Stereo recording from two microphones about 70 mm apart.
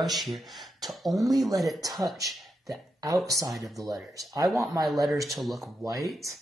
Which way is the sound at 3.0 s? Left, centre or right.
Right.